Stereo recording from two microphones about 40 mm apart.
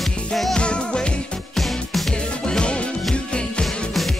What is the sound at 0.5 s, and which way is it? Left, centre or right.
Music, left.